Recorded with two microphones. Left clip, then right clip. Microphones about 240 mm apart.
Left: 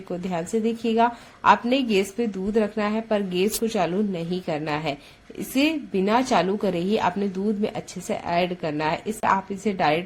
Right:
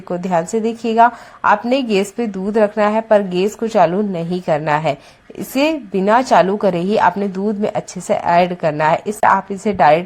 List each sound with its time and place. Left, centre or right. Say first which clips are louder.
0.1 s a woman's voice: right 10 dB; right